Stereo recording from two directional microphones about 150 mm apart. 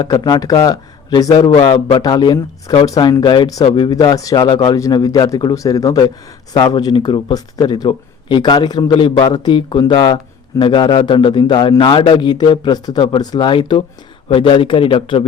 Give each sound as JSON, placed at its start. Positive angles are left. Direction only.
{"t": 0.0, "sound": "speech", "side_deg": 25}
{"t": 3.9, "sound": "speech", "side_deg": 25}